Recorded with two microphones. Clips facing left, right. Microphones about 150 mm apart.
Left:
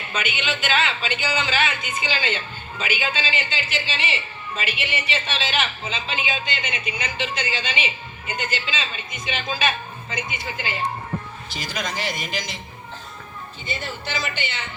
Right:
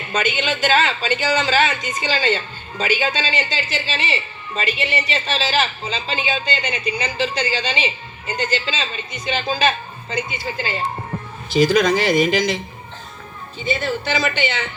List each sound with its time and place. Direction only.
0.1 s a man's voice: 40° right (ahead or behind)
11.5 s speech: 90° right
13.6 s speech: 90° right